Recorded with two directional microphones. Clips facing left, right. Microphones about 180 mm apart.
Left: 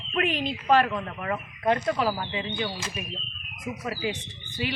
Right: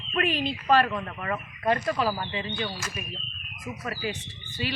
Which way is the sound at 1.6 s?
20° left (ahead or behind).